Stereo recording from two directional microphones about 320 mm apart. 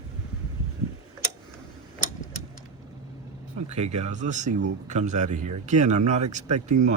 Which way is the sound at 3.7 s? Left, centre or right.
Centre.